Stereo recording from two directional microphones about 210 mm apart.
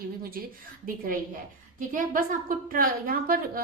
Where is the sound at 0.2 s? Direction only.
45° right (ahead or behind).